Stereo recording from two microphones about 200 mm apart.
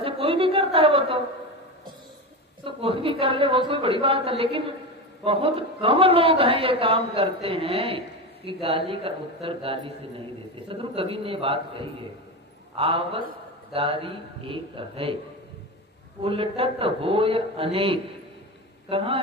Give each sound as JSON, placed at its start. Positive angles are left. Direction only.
{"t": 0.0, "sound": "a sound", "side_deg": -25}
{"t": 2.6, "sound": "speech", "side_deg": -25}
{"t": 16.2, "sound": "speech", "side_deg": -30}